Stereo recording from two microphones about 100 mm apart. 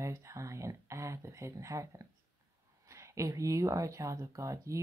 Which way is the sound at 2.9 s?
30° right (ahead or behind).